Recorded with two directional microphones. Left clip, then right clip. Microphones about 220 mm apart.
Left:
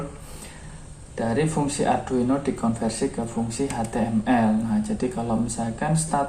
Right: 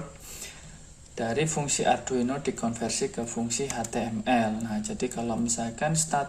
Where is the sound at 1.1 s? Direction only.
45° right (ahead or behind).